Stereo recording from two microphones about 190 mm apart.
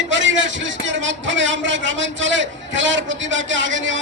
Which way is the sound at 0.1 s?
80° right.